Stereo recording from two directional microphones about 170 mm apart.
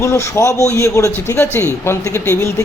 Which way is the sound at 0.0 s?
15° left (ahead or behind).